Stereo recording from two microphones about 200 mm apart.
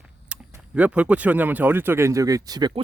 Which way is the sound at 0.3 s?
5° right (ahead or behind).